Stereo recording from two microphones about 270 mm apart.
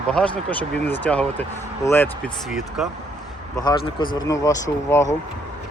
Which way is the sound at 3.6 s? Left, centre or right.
Centre.